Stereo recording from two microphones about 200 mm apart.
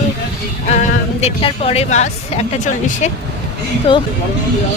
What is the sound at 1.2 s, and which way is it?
Speech, 30° left (ahead or behind).